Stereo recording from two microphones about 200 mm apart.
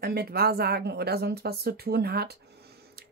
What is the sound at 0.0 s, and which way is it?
Speech, 50° right (ahead or behind).